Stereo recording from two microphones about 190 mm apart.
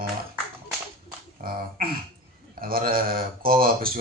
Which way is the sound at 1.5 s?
50° right (ahead or behind).